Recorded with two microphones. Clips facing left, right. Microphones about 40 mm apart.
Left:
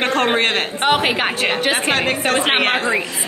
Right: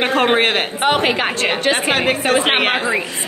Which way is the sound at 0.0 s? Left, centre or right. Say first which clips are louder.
Right 2 dB; centre.